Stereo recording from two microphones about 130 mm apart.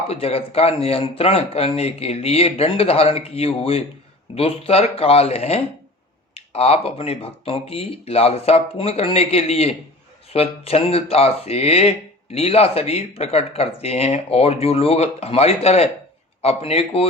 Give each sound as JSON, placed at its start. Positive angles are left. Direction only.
{"t": 0.1, "sound": "speech", "side_deg": 50}